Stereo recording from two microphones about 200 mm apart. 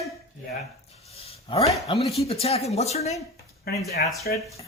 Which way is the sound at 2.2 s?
30° left (ahead or behind).